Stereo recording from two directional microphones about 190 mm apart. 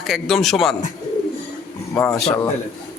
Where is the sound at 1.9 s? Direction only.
10° left (ahead or behind).